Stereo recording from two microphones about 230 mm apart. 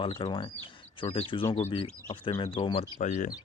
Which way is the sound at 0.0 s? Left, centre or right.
Centre.